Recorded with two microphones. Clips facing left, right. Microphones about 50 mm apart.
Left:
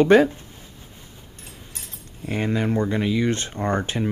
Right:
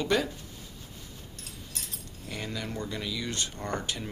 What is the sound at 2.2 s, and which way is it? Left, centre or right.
Speech, left.